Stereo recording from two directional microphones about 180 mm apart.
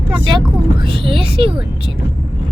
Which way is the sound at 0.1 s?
25° right (ahead or behind).